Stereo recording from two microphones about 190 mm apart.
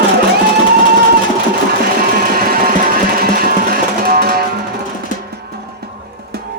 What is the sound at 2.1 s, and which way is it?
Music, 50° right (ahead or behind).